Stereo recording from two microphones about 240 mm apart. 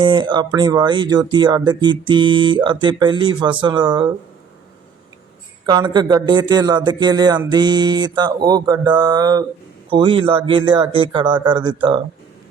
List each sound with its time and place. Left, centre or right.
0.0 s speech: centre
5.6 s a man's voice: centre